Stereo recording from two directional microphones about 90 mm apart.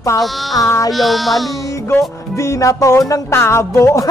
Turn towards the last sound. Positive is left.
turn(degrees=35)  # may be behind; listen again after turning